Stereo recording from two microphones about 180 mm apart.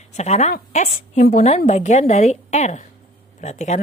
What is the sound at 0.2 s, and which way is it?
A woman's voice, 40° left (ahead or behind).